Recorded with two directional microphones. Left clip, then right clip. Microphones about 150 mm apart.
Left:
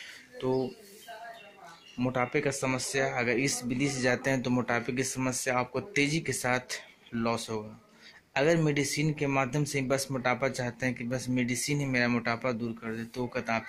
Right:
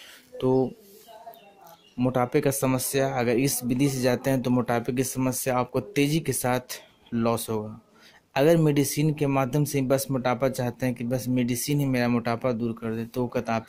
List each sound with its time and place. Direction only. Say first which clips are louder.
0.4 s speech: right 7 dB; 45° right (ahead or behind)
2.0 s speech: right 5 dB; 35° right (ahead or behind)
2.3 s speech: right 5 dB; 50° right (ahead or behind)